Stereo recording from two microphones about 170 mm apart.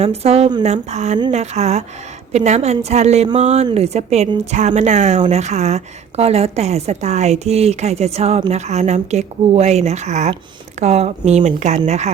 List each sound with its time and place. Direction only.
0.0 s a woman's voice: 35° right (ahead or behind)